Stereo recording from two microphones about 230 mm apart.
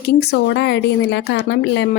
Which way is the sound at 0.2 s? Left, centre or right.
Left.